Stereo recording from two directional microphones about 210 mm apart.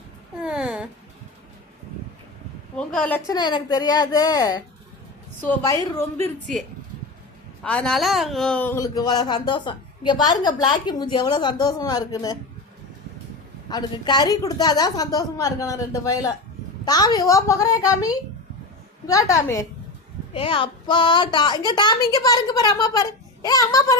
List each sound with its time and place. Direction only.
0.3 s a sound: 5° right (ahead or behind)
2.7 s a sound: 5° left (ahead or behind)
3.2 s a woman's voice: 20° left (ahead or behind)
13.7 s a woman's voice: 20° left (ahead or behind)
19.0 s a woman's voice: 15° left (ahead or behind)
20.3 s speech: 25° left (ahead or behind)